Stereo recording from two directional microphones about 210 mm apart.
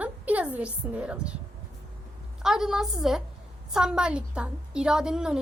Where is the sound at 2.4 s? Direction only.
Centre (ahead or behind).